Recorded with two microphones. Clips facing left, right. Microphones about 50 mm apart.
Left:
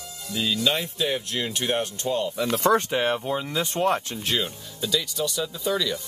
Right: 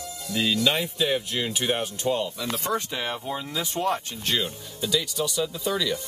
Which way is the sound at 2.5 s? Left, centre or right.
Left.